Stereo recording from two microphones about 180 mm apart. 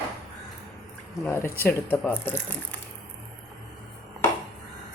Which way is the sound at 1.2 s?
15° left (ahead or behind).